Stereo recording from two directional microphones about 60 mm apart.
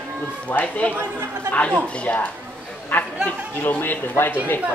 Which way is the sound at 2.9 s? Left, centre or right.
Left.